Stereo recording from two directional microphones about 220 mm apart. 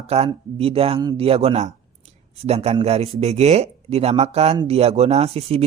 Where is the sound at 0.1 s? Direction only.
25° right (ahead or behind).